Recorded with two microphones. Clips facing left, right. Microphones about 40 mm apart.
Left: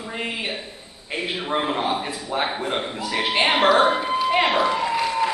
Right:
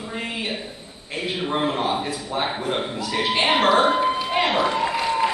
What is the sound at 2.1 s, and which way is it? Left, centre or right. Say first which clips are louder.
A man's voice: even; left.